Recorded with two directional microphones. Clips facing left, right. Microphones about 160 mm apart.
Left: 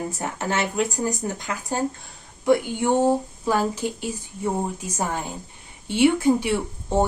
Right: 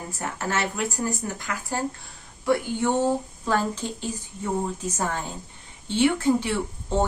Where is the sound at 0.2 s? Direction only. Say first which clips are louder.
Even; 20° left (ahead or behind).